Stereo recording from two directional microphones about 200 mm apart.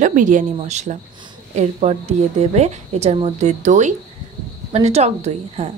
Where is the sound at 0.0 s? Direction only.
40° right (ahead or behind).